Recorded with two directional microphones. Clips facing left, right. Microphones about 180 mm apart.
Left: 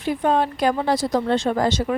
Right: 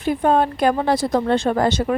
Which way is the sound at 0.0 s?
50° right (ahead or behind).